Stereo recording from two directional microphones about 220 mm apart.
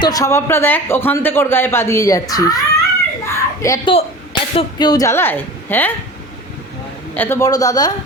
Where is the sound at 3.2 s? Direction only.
10° left (ahead or behind).